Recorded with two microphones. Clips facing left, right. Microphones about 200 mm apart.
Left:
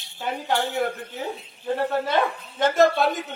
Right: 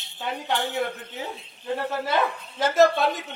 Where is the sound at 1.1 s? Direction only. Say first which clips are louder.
Left 3 dB; centre (ahead or behind).